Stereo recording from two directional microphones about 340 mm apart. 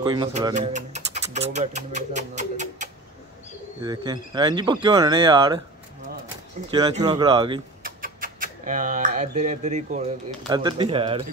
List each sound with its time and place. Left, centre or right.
0.0 s speech: centre
6.7 s speech: centre
7.8 s speech: right